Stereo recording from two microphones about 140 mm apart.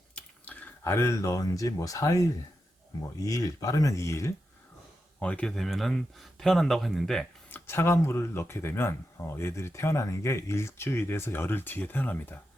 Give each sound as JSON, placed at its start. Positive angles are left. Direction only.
{"t": 0.2, "sound": "speech", "side_deg": 10}
{"t": 5.2, "sound": "speech", "side_deg": 10}
{"t": 7.5, "sound": "speech", "side_deg": 15}